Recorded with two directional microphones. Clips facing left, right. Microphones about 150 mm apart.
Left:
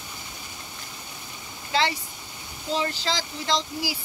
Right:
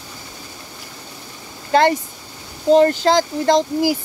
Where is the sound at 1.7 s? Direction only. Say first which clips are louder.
Right 10 dB; 50° right (ahead or behind).